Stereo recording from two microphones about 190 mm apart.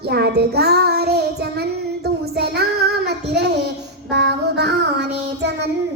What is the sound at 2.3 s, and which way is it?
Child singing, 55° right (ahead or behind).